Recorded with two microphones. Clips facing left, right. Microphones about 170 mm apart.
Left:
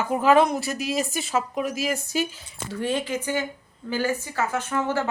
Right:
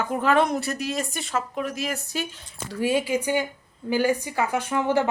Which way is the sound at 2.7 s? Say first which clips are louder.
Right 3 dB; 10° right (ahead or behind).